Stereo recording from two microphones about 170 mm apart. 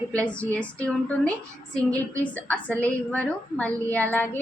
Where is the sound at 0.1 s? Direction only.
5° left (ahead or behind).